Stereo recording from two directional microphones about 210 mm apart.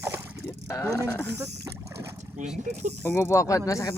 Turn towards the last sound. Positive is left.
turn(degrees=15)  # may be behind; listen again after turning